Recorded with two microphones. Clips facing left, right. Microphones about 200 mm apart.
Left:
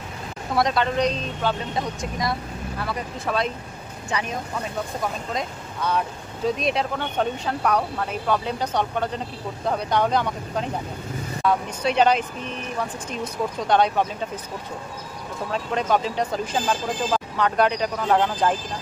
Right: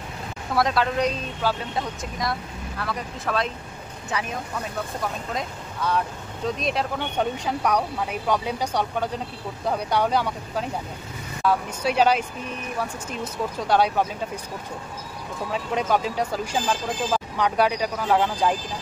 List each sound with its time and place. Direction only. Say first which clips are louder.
0.6 s speech: left 1 dB; centre (ahead or behind)
5.9 s speech: even; centre (ahead or behind)
13.2 s speech: left 2 dB; 5° right (ahead or behind)
15.5 s speech: left 1 dB; 10° right (ahead or behind)